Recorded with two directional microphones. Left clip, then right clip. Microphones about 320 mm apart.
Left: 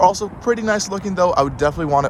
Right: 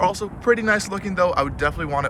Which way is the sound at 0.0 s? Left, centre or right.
Centre.